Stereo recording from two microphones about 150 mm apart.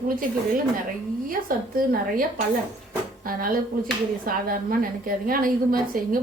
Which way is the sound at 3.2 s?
70° right (ahead or behind).